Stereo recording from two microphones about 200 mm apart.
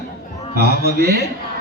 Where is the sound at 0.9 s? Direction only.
50° right (ahead or behind).